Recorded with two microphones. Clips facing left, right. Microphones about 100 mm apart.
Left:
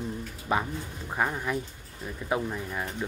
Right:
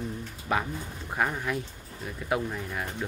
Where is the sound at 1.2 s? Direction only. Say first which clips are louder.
Even; 5° left (ahead or behind).